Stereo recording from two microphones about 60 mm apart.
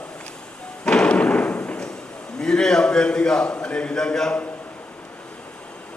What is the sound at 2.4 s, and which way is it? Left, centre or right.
A man's voice, centre.